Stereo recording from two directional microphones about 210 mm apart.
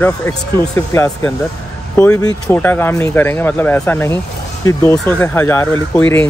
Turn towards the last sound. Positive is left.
turn(degrees=10)  # may be behind; listen again after turning